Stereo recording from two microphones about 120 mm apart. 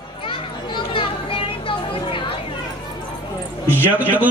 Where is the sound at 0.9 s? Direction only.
50° left (ahead or behind).